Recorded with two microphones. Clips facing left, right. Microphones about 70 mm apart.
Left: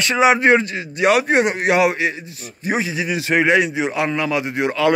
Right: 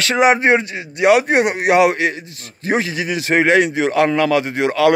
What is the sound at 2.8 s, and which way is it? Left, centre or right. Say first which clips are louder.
A man's voice: right 1 dB; right.